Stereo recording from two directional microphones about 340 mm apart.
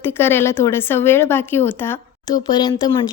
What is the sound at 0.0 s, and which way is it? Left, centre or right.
Speech, centre.